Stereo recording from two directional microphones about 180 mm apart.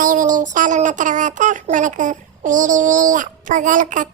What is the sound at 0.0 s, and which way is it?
Child singing, 45° right (ahead or behind).